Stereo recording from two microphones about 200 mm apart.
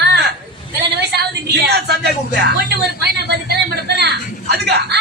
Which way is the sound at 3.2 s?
55° right (ahead or behind).